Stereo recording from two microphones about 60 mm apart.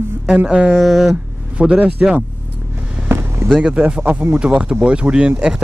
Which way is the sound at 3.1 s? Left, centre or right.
Right.